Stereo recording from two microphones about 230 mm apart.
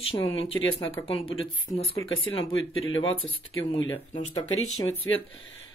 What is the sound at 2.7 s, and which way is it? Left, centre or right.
Speech, left.